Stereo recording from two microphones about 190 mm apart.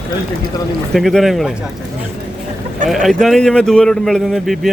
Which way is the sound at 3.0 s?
Centre (ahead or behind).